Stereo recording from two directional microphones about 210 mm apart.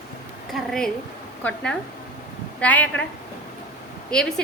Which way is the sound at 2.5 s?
5° left (ahead or behind).